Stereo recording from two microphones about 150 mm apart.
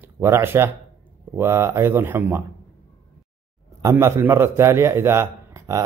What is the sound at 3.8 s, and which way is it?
Speech, 20° right (ahead or behind).